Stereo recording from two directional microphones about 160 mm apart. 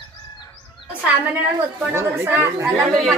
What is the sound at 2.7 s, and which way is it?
Speech, centre (ahead or behind).